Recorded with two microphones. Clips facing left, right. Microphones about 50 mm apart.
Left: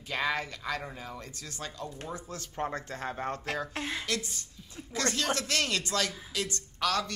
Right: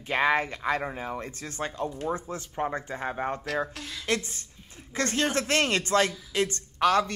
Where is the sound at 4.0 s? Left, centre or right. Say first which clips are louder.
Right 5 dB; right.